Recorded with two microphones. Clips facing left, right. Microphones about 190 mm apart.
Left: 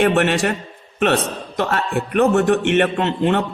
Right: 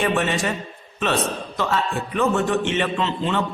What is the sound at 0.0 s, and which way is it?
A man's voice, 65° left (ahead or behind).